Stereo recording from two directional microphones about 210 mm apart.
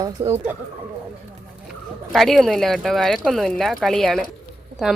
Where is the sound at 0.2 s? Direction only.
30° right (ahead or behind).